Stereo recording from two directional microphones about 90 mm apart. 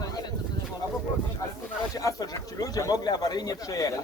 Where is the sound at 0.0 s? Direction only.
45° left (ahead or behind).